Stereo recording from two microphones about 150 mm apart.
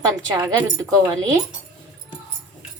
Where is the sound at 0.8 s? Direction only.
25° right (ahead or behind).